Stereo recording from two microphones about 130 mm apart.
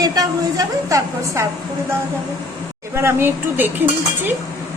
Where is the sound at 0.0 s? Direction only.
30° right (ahead or behind).